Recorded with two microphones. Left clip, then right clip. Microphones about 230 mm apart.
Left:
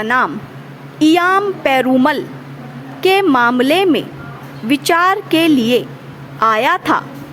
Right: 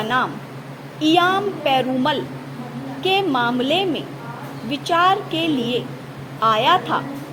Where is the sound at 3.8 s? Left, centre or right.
Left.